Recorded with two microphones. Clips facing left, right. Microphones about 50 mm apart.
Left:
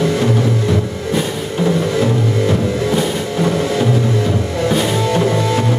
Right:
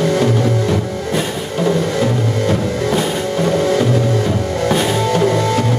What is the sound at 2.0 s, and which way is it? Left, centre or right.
Music, centre.